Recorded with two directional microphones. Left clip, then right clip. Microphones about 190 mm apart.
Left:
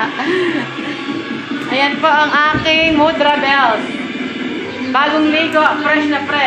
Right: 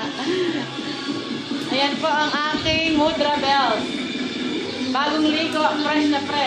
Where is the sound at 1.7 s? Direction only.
30° left (ahead or behind).